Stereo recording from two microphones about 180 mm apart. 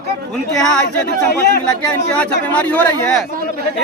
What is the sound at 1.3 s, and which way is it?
Speech, 60° left (ahead or behind).